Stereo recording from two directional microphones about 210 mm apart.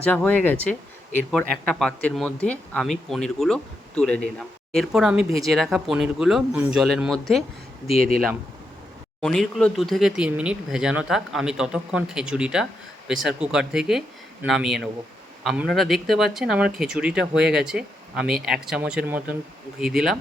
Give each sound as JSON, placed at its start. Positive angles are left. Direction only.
{"t": 0.0, "sound": "speech", "side_deg": 5}
{"t": 7.9, "sound": "speech", "side_deg": -45}
{"t": 9.2, "sound": "speech", "side_deg": 0}